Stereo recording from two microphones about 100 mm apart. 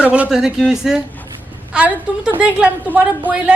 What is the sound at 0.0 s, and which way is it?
A woman's voice, 15° right (ahead or behind).